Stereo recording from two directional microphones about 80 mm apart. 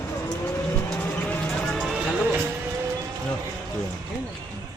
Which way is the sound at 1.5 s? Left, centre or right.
Centre.